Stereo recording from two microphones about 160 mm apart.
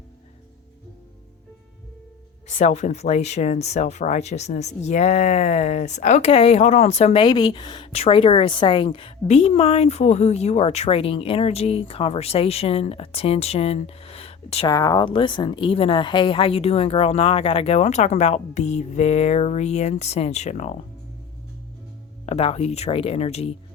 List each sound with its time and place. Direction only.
2.5 s speech: 45° left (ahead or behind)
7.2 s a woman's voice: 30° left (ahead or behind)
14.7 s a woman's voice: 20° left (ahead or behind); by 20.8 s 45° left (ahead or behind)
22.3 s a woman's voice: 40° left (ahead or behind)